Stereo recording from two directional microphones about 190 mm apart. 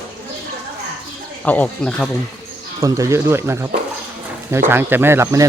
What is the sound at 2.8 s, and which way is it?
Speech, 15° right (ahead or behind).